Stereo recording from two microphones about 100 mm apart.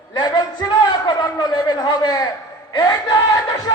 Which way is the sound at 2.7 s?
40° left (ahead or behind).